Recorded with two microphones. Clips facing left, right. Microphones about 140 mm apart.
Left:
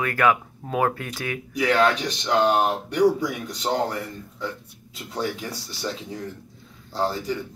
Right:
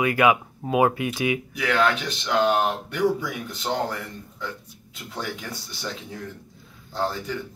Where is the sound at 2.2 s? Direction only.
30° left (ahead or behind).